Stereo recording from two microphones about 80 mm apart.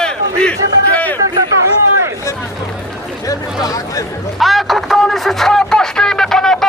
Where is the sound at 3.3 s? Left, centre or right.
Left.